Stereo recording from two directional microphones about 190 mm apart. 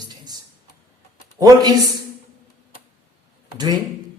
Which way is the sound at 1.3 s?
20° right (ahead or behind).